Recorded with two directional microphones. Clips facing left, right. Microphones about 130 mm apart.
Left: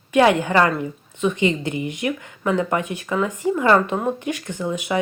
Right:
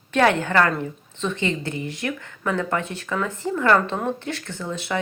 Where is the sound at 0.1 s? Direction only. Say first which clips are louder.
Left 3 dB; 10° left (ahead or behind).